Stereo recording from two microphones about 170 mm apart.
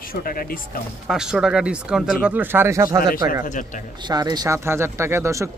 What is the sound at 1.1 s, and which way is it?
Speech, 5° right (ahead or behind).